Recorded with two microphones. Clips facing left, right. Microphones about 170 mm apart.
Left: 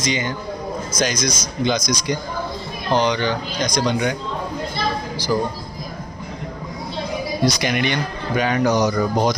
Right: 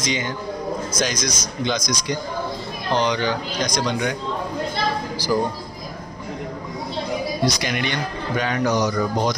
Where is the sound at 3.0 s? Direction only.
Centre (ahead or behind).